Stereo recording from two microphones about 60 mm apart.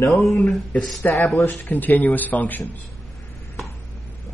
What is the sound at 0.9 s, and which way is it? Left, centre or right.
Speech, centre.